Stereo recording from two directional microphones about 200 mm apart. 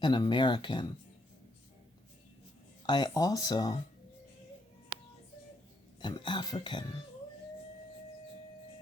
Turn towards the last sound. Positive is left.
turn(degrees=20)  # may be behind; listen again after turning